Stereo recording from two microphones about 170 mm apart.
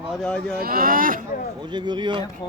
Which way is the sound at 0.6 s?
60° right (ahead or behind).